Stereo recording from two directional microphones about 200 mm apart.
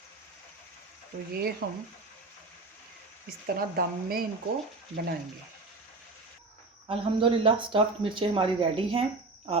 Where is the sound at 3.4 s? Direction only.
50° right (ahead or behind).